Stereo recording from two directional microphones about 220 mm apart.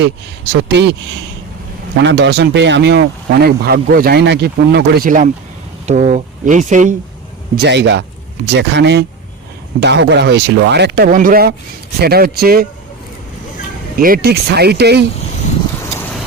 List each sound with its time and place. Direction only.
0.5 s speech: 50° right (ahead or behind)
2.0 s speech: 55° right (ahead or behind); by 6.9 s 35° right (ahead or behind)
7.5 s speech: 45° right (ahead or behind)
14.0 s speech: 45° right (ahead or behind)